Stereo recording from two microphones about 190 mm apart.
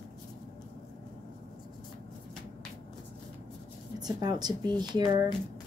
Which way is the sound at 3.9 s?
20° right (ahead or behind).